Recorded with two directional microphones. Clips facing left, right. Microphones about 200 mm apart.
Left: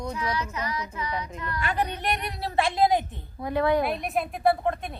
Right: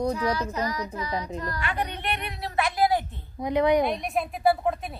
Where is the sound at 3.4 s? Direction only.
20° right (ahead or behind).